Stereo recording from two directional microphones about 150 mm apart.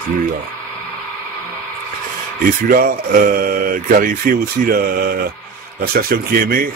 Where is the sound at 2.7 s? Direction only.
75° right (ahead or behind).